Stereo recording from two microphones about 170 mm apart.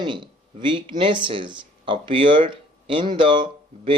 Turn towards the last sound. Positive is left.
turn(degrees=-30)  # may be behind; listen again after turning